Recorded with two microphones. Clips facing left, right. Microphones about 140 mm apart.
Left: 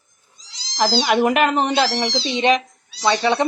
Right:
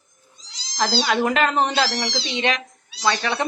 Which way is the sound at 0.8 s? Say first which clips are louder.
Left 4 dB; 20° left (ahead or behind).